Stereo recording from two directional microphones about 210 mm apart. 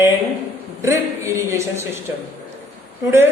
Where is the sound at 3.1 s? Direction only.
10° right (ahead or behind).